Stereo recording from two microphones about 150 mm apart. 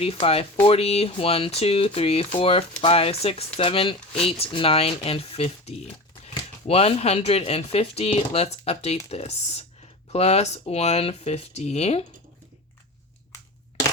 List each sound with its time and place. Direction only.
0.0 s speech: 40° left (ahead or behind)